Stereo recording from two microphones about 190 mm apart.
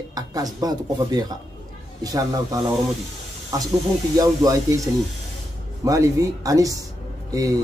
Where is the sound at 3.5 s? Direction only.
20° right (ahead or behind).